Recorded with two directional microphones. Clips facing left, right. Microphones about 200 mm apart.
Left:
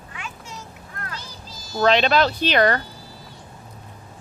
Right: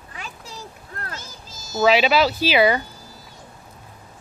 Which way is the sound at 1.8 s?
5° right (ahead or behind).